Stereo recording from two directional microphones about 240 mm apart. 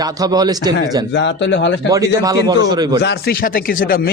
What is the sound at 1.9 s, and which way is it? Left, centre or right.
Speech, centre.